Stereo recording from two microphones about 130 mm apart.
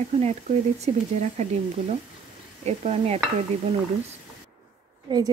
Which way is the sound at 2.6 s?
50° right (ahead or behind).